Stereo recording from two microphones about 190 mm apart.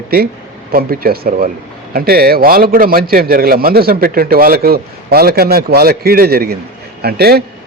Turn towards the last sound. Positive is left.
turn(degrees=-55)  # may be behind; listen again after turning